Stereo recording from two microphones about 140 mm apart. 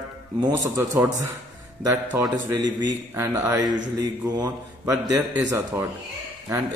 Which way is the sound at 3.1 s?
15° right (ahead or behind).